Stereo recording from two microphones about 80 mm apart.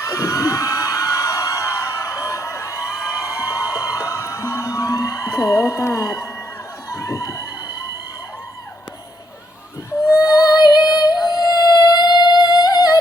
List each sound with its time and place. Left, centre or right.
0.1 s a sound: left
3.3 s music: left
6.9 s crowd: left
10.1 s music: left